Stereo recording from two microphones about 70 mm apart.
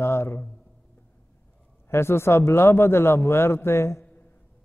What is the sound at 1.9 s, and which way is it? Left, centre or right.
Mantra, left.